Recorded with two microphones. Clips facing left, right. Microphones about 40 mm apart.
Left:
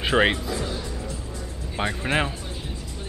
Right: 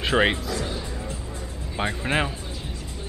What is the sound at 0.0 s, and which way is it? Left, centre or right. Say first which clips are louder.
Speech: left 1 dB; centre.